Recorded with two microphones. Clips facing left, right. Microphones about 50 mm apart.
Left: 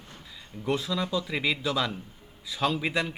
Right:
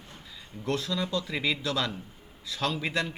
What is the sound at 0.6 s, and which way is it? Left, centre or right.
A man's voice, centre.